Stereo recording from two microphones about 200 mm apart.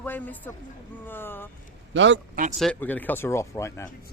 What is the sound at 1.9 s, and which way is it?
Speech, 65° right (ahead or behind).